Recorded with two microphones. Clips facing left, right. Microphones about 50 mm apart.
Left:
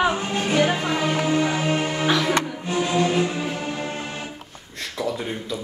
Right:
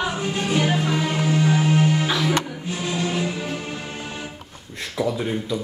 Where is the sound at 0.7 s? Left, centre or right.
Left.